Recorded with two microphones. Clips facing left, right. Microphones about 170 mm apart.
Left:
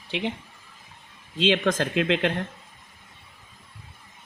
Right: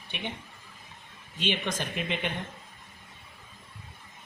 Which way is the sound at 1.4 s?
90° left.